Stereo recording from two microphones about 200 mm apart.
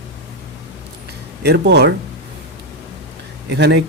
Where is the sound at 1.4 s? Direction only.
55° right (ahead or behind).